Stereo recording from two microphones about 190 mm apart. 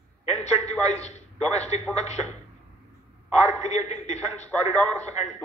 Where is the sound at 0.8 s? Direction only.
35° left (ahead or behind).